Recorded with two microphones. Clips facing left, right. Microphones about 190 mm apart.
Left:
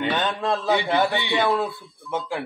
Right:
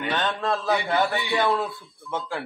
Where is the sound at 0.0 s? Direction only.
15° left (ahead or behind).